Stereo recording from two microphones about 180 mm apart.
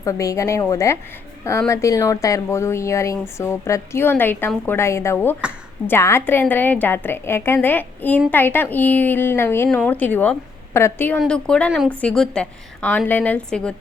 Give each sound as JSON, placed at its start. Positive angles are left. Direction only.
{"t": 0.0, "sound": "speech", "side_deg": 20}